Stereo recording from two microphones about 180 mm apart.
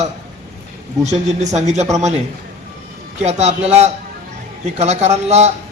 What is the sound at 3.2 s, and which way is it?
Speech, 40° right (ahead or behind).